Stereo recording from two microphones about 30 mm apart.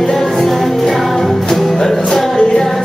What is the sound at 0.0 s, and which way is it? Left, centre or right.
Music, centre.